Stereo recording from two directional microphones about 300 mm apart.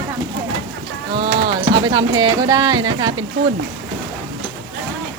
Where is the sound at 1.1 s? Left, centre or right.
Centre.